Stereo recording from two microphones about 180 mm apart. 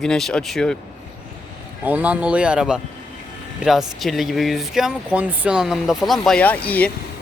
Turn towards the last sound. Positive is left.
turn(degrees=5)  # may be behind; listen again after turning